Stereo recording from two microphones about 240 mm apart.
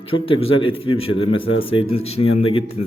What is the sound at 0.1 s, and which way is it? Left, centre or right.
Speech, left.